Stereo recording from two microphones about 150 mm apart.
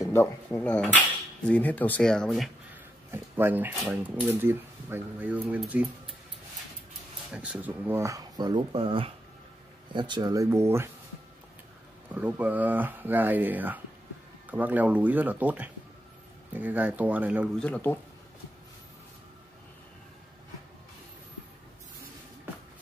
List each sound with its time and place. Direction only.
0.0 s speech: 15° left (ahead or behind); by 2.5 s centre (ahead or behind)
3.1 s speech: 15° right (ahead or behind)
7.3 s speech: 10° right (ahead or behind)
12.1 s speech: 10° right (ahead or behind)
17.6 s speech: 10° left (ahead or behind)